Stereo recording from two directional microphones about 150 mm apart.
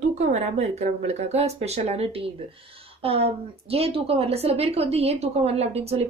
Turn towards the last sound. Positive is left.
turn(degrees=-45)  # may be behind; listen again after turning